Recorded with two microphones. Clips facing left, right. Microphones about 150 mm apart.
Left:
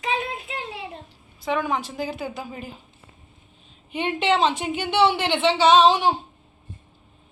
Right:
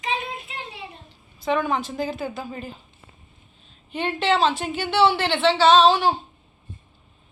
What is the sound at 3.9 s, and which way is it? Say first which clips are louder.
A woman's voice: even; 15° left (ahead or behind).